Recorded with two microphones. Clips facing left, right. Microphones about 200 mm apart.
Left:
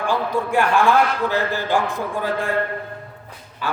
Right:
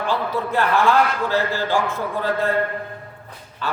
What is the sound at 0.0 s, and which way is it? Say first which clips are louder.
A man's voice: left 1 dB; 15° left (ahead or behind).